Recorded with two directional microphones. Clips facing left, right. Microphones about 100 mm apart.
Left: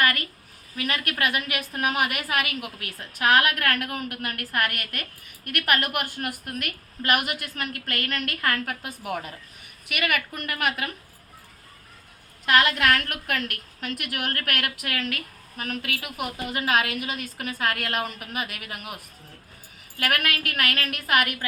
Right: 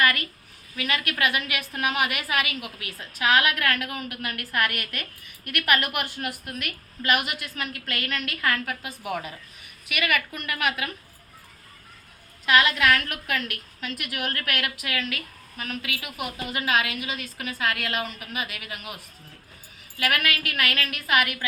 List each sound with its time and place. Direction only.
0.0 s a sound: 40° left (ahead or behind)
0.8 s a woman's voice: 40° left (ahead or behind)
9.9 s a woman's voice: 45° left (ahead or behind)
12.5 s a woman's voice: 50° left (ahead or behind)
20.0 s a woman's voice: 50° left (ahead or behind)